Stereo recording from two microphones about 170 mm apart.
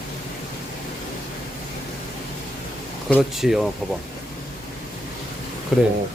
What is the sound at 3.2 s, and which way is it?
Speech, centre (ahead or behind).